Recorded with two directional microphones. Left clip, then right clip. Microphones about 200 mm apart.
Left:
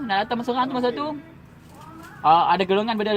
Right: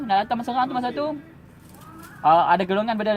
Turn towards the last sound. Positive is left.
turn(degrees=-20)  # may be behind; listen again after turning